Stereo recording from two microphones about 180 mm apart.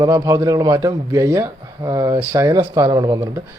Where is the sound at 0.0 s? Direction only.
20° right (ahead or behind).